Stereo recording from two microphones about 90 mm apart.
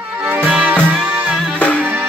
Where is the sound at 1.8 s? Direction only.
25° right (ahead or behind).